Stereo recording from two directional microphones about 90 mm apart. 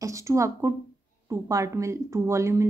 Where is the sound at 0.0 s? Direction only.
35° right (ahead or behind).